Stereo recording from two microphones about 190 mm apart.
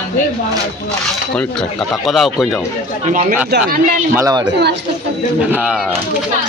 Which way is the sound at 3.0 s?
45° right (ahead or behind).